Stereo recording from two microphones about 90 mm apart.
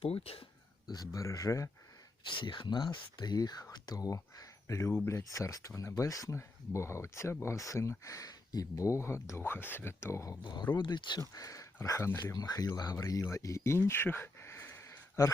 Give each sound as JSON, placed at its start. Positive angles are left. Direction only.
{"t": 0.0, "sound": "speech", "side_deg": 90}
{"t": 0.9, "sound": "speech", "side_deg": 40}
{"t": 2.2, "sound": "speech", "side_deg": 60}
{"t": 10.4, "sound": "speech", "side_deg": 55}
{"t": 11.2, "sound": "speech", "side_deg": 40}
{"t": 12.3, "sound": "speech", "side_deg": 45}
{"t": 13.8, "sound": "a sound", "side_deg": 25}